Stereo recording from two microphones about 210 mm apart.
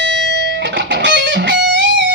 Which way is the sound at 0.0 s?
55° right (ahead or behind).